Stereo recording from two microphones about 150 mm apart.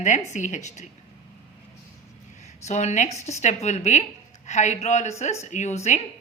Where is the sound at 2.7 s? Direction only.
50° left (ahead or behind).